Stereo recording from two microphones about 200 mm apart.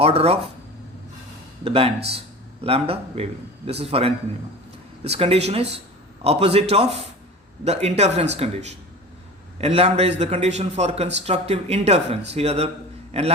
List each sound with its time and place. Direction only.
0.0 s speech: 30° right (ahead or behind)
1.6 s a man's voice: 30° right (ahead or behind)